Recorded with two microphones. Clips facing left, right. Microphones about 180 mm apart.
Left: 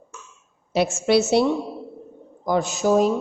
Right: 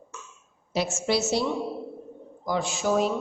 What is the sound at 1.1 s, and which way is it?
Speech, 65° left (ahead or behind).